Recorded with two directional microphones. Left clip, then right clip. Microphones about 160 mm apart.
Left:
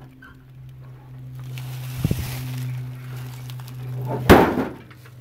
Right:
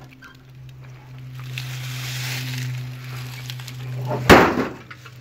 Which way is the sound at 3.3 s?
20° left (ahead or behind).